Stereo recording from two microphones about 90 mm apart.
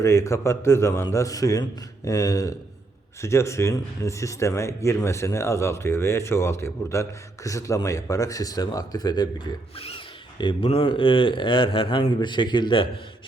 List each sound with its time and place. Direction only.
0.0 s speech: 30° left (ahead or behind); by 9.5 s 50° left (ahead or behind)
10.4 s speech: 85° left; by 12.9 s 65° left (ahead or behind)